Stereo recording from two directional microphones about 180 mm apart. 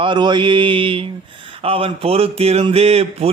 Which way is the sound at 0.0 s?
25° right (ahead or behind).